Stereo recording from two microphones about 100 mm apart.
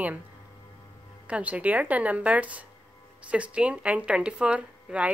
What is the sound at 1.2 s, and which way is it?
Speech, 15° right (ahead or behind).